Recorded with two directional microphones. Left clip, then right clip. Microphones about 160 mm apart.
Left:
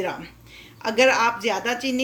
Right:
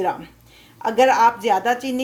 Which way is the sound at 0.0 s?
40° right (ahead or behind).